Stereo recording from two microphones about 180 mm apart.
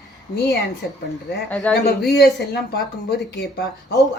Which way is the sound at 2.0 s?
65° left (ahead or behind).